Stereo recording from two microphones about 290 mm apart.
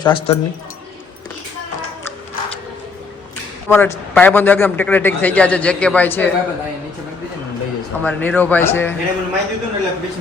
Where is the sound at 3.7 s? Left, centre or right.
Centre.